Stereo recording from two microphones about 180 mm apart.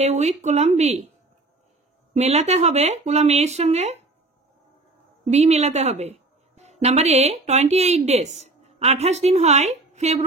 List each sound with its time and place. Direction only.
0.0 s speech: 40° right (ahead or behind)
2.1 s speech: 35° right (ahead or behind)
5.2 s a woman's voice: 40° right (ahead or behind)